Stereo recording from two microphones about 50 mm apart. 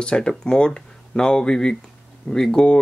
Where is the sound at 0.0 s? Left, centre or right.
Centre.